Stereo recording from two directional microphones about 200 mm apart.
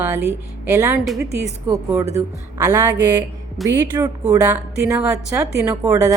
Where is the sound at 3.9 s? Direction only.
15° right (ahead or behind).